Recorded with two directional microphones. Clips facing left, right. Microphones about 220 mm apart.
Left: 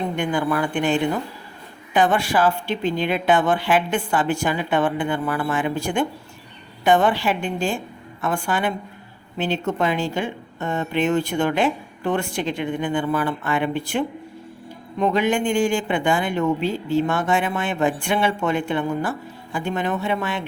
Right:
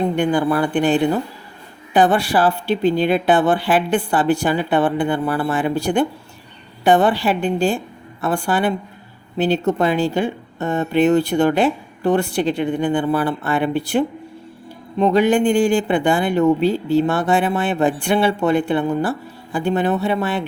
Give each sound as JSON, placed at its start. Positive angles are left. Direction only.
{"t": 0.2, "sound": "speech", "side_deg": -35}